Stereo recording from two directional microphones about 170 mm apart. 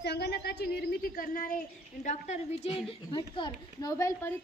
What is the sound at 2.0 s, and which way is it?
A child's voice, 40° left (ahead or behind).